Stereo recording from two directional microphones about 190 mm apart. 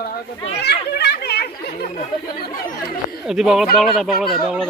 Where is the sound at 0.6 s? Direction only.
60° left (ahead or behind).